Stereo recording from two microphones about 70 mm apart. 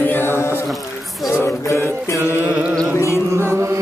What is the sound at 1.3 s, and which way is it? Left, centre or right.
Music, left.